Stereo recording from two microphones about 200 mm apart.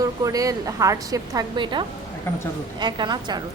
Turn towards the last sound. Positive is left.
turn(degrees=-20)  # may be behind; listen again after turning